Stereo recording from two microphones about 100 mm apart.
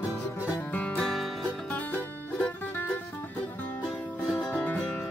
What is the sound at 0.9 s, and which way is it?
Music, centre (ahead or behind).